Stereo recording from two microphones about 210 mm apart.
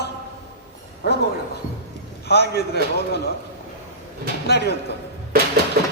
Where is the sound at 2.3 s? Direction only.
50° left (ahead or behind).